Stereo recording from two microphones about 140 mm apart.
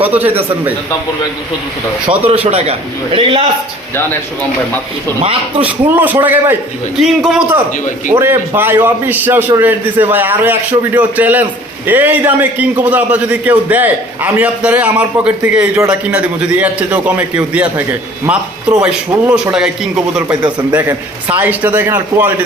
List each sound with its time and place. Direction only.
0.0 s a man's voice: 15° right (ahead or behind)
2.0 s a man's voice: 45° right (ahead or behind)
5.5 s a man's voice: 10° right (ahead or behind)
7.0 s a man's voice: centre (ahead or behind)
8.1 s a man's voice: 15° right (ahead or behind)